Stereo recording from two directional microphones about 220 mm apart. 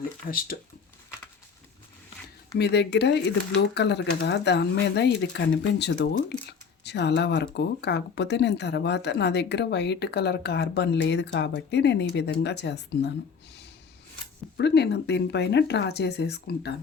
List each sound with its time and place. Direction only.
0.3 s speech: 40° left (ahead or behind)
2.6 s speech: 50° left (ahead or behind)
14.6 s speech: 50° left (ahead or behind)